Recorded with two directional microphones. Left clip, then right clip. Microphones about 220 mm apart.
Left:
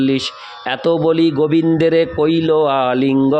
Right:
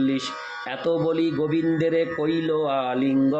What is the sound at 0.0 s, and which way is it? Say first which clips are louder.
A man's voice: left 7 dB; 50° left (ahead or behind).